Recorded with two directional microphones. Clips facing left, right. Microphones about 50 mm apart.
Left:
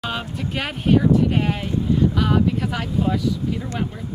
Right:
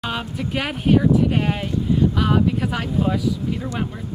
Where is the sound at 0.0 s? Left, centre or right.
Centre.